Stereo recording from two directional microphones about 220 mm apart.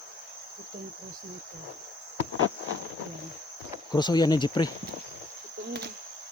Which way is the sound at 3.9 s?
20° left (ahead or behind).